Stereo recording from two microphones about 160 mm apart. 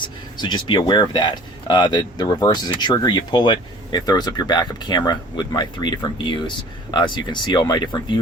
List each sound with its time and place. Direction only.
0.0 s speech: 30° left (ahead or behind)